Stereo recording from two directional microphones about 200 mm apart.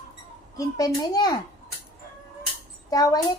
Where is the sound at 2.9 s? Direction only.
20° left (ahead or behind).